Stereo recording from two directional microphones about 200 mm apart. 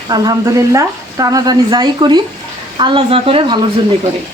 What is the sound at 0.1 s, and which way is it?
A woman's voice, 20° right (ahead or behind).